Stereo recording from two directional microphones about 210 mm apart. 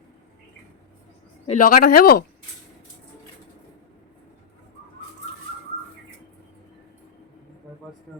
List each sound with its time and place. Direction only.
1.5 s speech: 40° left (ahead or behind)